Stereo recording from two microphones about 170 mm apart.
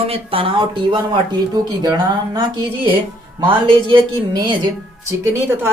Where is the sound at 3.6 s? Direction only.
30° right (ahead or behind).